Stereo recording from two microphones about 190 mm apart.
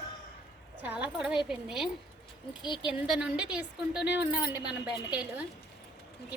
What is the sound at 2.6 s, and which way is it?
Speech, 25° left (ahead or behind).